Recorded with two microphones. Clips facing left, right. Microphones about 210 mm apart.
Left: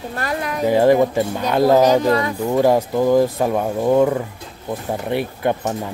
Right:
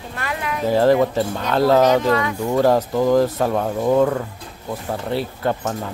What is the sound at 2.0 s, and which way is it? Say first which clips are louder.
Speech: left 1 dB; 35° left (ahead or behind).